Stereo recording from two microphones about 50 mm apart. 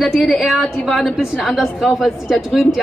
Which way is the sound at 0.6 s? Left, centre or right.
Centre.